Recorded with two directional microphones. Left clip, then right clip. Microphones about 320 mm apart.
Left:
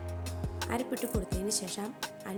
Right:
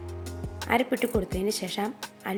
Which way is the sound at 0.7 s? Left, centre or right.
Left.